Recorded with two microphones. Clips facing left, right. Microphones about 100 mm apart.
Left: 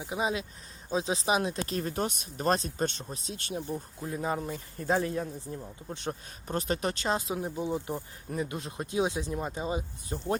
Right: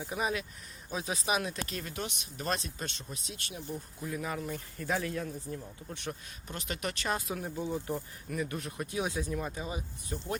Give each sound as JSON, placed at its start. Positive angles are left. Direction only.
{"t": 0.1, "sound": "speech", "side_deg": 25}